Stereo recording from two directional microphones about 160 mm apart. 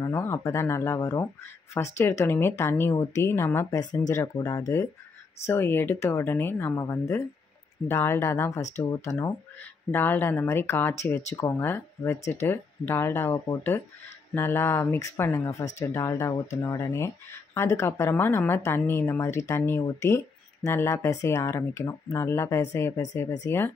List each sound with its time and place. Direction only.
0.0 s speech: 15° left (ahead or behind)